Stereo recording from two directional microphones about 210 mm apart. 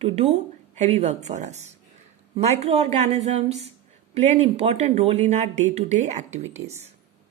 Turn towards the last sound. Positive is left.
turn(degrees=-35)  # may be behind; listen again after turning